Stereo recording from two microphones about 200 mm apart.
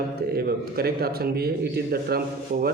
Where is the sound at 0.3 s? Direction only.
50° right (ahead or behind).